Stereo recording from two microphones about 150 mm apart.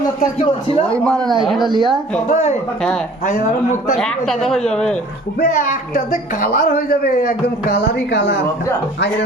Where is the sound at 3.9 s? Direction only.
5° left (ahead or behind).